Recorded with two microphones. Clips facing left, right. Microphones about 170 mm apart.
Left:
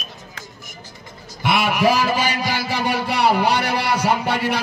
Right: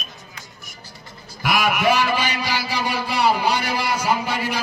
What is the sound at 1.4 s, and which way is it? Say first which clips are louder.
A man's voice: left 2 dB; 25° left (ahead or behind).